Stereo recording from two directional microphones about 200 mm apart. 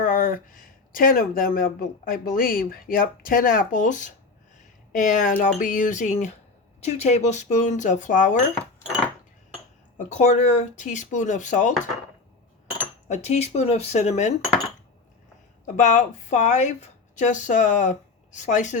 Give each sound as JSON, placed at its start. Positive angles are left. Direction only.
{"t": 0.0, "sound": "speech", "side_deg": 45}
{"t": 10.0, "sound": "speech", "side_deg": 35}
{"t": 13.1, "sound": "speech", "side_deg": 35}
{"t": 15.6, "sound": "speech", "side_deg": 40}